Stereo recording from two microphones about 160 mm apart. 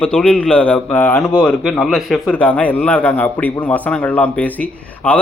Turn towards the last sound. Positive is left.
turn(degrees=10)  # may be behind; listen again after turning